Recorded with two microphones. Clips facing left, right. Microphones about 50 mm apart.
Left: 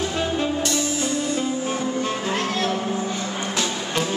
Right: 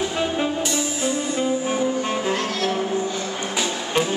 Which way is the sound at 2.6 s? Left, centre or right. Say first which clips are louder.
Right 1 dB; centre.